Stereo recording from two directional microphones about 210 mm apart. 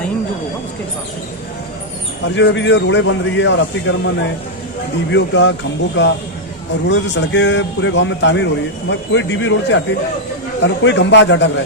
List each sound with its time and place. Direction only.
2.3 s speech: 60° left (ahead or behind)
5.1 s speech: 60° left (ahead or behind)